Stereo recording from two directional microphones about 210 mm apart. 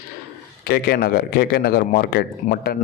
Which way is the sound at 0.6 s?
50° left (ahead or behind).